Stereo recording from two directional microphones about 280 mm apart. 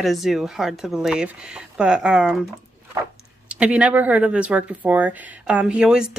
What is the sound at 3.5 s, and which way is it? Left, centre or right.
Speech, centre.